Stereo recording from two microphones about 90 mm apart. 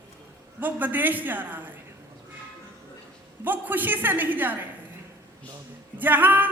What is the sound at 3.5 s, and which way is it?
A woman's voice, 20° right (ahead or behind).